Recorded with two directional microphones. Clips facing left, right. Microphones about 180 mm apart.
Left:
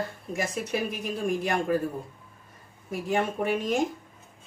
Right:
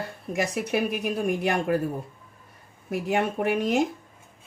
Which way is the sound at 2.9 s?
70° right (ahead or behind).